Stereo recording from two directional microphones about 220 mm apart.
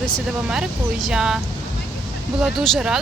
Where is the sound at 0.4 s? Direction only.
5° right (ahead or behind).